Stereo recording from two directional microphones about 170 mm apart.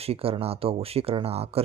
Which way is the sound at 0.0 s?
35° right (ahead or behind).